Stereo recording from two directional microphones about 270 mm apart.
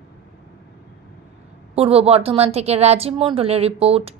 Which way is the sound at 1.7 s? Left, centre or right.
Right.